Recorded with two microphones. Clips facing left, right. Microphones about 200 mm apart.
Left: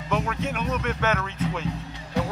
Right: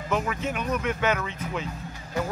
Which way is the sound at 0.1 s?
5° right (ahead or behind).